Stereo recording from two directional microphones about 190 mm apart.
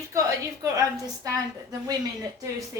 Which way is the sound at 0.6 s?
20° right (ahead or behind).